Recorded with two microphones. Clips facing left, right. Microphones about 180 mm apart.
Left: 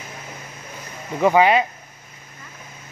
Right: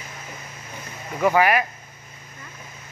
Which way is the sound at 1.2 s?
20° left (ahead or behind).